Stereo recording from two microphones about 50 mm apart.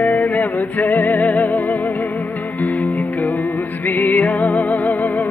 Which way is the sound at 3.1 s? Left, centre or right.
Left.